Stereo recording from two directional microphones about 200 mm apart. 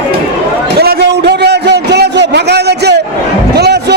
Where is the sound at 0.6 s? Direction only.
50° right (ahead or behind).